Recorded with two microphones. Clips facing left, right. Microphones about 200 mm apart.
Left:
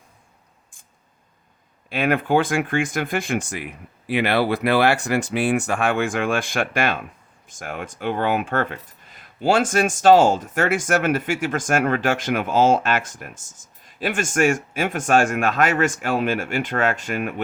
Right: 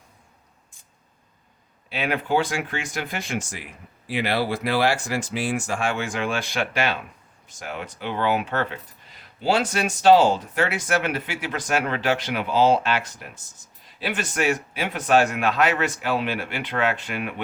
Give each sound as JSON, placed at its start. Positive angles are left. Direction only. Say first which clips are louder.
{"t": 1.9, "sound": "speech", "louder": "left 4 dB", "side_deg": 50}